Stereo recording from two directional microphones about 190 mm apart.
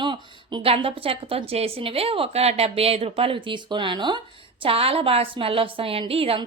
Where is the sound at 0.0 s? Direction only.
25° right (ahead or behind).